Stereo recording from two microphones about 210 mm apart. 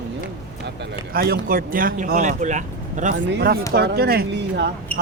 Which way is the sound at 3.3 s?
50° right (ahead or behind).